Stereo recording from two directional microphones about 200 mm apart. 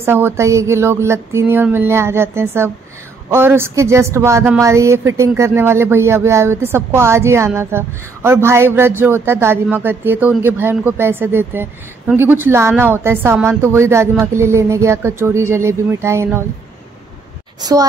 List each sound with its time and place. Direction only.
0.0 s a woman's voice: 10° right (ahead or behind)
17.6 s a woman's voice: 20° right (ahead or behind)